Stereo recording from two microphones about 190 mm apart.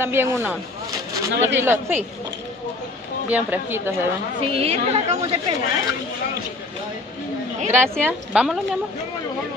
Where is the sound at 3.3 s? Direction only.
10° right (ahead or behind).